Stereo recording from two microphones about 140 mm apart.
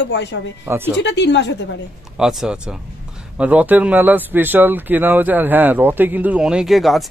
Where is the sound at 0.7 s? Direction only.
15° right (ahead or behind).